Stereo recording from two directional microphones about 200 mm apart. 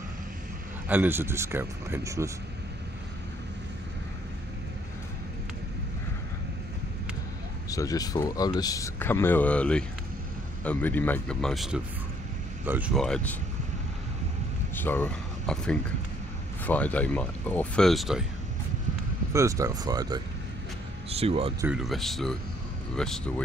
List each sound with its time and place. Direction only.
0.8 s speech: 10° right (ahead or behind)
7.7 s speech: 15° left (ahead or behind)
14.8 s speech: 10° left (ahead or behind)
19.3 s speech: 15° right (ahead or behind)
21.1 s speech: 30° right (ahead or behind)
21.5 s speech: 5° right (ahead or behind)